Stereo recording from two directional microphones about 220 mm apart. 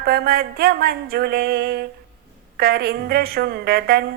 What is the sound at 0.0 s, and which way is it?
A woman's voice, 45° right (ahead or behind).